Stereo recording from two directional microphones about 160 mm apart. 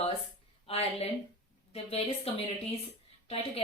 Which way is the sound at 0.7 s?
40° left (ahead or behind).